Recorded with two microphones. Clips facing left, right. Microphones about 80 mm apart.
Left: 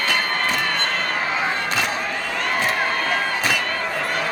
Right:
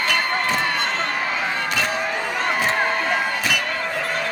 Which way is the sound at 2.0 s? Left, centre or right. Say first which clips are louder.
Right 2 dB; centre.